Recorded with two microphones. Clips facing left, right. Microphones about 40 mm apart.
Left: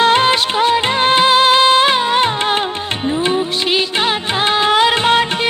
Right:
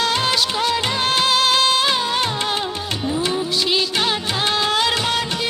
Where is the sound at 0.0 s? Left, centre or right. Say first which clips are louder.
Left 7 dB; left.